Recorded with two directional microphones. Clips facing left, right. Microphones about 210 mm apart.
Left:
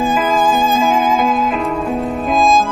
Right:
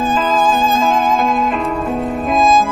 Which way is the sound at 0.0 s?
10° left (ahead or behind).